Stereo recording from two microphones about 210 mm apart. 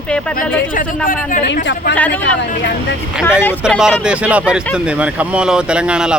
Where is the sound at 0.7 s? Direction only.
40° left (ahead or behind).